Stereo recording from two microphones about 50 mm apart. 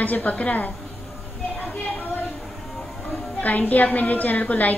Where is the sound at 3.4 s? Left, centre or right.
Left.